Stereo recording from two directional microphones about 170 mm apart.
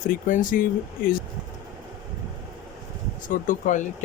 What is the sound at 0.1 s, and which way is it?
Speech, 50° left (ahead or behind).